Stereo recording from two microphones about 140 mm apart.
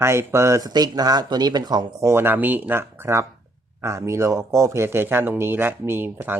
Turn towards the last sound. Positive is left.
turn(degrees=-15)  # may be behind; listen again after turning